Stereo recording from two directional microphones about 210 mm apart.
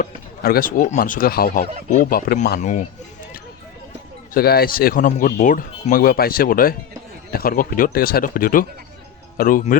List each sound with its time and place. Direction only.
0.0 s speech: 45° left (ahead or behind)
4.4 s speech: 45° left (ahead or behind)